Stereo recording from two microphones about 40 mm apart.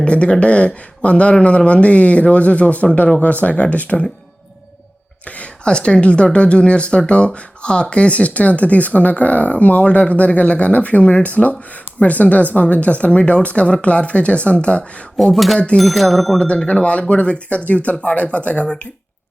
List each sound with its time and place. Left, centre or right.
0.0 s speech: left
5.2 s a sound: left
5.6 s speech: left
15.1 s speech: centre
15.5 s speech: left
15.8 s speech: centre
16.6 s speech: left